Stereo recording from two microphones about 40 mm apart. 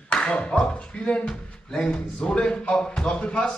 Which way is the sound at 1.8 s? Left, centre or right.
Left.